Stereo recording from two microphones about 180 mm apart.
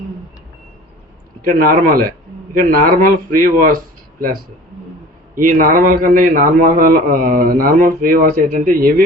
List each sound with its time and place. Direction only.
1.5 s a man's voice: 50° right (ahead or behind)
5.3 s a man's voice: 50° right (ahead or behind)